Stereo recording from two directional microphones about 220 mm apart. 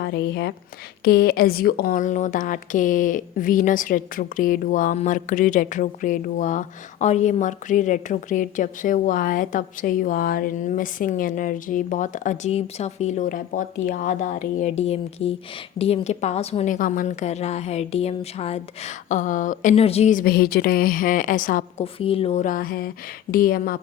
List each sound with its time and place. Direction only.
0.0 s a woman's voice: 50° left (ahead or behind)
21.9 s a woman's voice: 25° left (ahead or behind); by 23.8 s 40° left (ahead or behind)